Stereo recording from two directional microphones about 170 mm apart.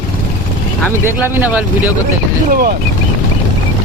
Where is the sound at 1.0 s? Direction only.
15° right (ahead or behind).